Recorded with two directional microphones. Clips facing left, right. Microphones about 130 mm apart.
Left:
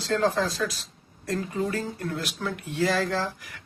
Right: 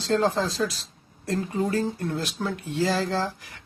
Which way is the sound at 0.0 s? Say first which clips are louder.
Right 1 dB; 25° right (ahead or behind).